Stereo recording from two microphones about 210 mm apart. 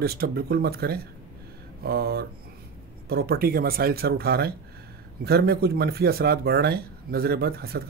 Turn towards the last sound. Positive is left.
turn(degrees=-45)  # may be behind; listen again after turning